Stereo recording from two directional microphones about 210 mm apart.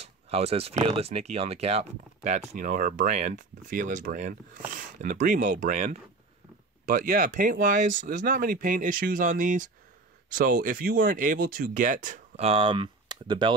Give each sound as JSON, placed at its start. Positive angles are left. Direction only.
{"t": 0.0, "sound": "speech", "side_deg": -30}